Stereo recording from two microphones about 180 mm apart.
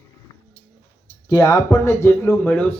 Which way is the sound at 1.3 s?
20° left (ahead or behind).